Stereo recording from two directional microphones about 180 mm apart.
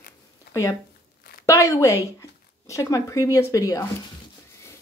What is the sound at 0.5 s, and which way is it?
Speech, 15° left (ahead or behind).